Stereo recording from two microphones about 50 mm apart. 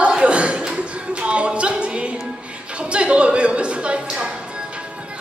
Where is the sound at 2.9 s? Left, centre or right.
Right.